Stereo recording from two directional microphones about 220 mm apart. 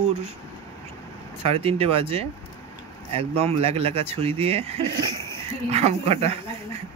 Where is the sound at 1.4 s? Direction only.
30° right (ahead or behind).